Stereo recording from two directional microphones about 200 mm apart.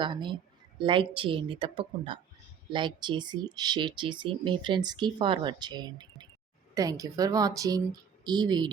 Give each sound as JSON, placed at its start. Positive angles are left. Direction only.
{"t": 0.0, "sound": "a woman's voice", "side_deg": -25}